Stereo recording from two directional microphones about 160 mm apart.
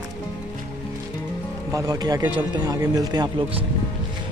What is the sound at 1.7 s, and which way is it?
A man's voice, 20° right (ahead or behind).